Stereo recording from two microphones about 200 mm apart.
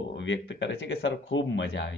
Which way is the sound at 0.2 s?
65° left (ahead or behind).